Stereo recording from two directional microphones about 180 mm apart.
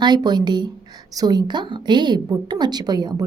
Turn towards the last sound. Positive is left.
turn(degrees=-20)  # may be behind; listen again after turning